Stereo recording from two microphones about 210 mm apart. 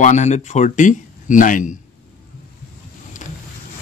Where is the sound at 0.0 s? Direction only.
35° left (ahead or behind).